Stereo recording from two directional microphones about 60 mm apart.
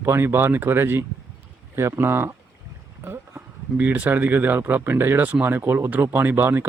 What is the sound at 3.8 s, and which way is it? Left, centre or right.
Speech, right.